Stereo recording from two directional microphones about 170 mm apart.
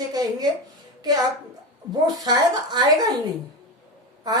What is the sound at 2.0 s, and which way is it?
A woman's voice, 25° right (ahead or behind).